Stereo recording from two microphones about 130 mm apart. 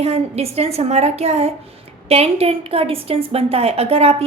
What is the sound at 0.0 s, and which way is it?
A woman's voice, 55° right (ahead or behind).